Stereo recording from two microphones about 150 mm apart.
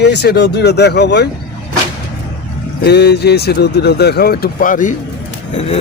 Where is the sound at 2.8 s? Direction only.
90° left; by 5.0 s 60° left (ahead or behind).